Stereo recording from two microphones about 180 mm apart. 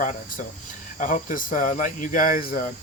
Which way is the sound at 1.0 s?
45° left (ahead or behind).